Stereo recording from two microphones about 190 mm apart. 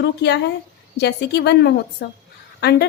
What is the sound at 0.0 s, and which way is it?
A woman's voice, 65° left (ahead or behind).